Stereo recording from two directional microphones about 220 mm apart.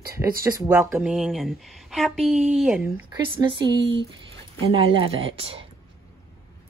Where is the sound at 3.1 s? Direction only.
20° right (ahead or behind).